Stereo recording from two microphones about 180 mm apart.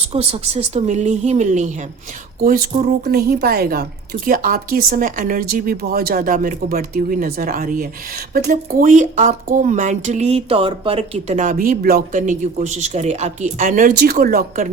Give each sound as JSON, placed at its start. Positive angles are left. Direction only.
{"t": 0.1, "sound": "speech", "side_deg": -35}
{"t": 2.4, "sound": "a woman's voice", "side_deg": -55}